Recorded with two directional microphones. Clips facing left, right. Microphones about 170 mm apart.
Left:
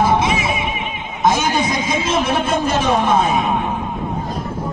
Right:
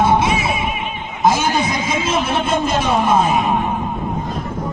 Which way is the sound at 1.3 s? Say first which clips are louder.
Even; 30° right (ahead or behind).